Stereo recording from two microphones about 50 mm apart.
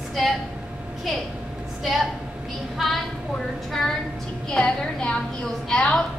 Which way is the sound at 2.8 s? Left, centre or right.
Centre.